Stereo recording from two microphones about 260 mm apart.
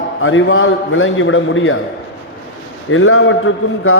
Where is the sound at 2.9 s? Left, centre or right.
Left.